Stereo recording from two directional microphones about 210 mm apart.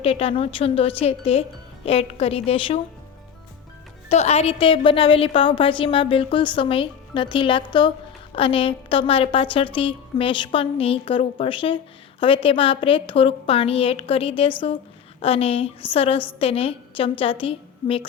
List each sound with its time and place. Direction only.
0.0 s a woman's voice: 25° left (ahead or behind)
4.1 s a woman's voice: 30° left (ahead or behind)